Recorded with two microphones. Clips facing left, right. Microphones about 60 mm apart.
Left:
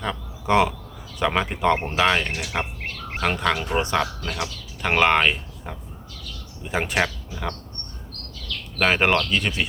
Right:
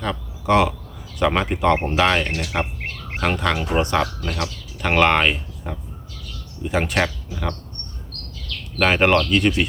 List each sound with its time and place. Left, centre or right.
0.0 s speech: centre
8.8 s speech: centre